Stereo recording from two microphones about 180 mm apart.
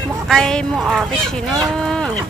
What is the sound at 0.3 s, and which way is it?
Speech, 5° left (ahead or behind).